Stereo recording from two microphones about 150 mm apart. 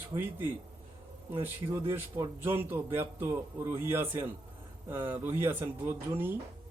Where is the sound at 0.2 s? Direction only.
15° right (ahead or behind).